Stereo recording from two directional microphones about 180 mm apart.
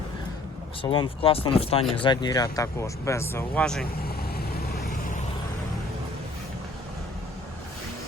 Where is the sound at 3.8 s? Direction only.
55° left (ahead or behind).